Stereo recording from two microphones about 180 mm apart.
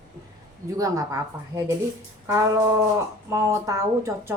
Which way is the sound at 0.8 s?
20° right (ahead or behind).